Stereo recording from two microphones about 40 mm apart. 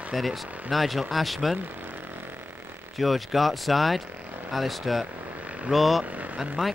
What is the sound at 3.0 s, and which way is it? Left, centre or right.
Speech, centre.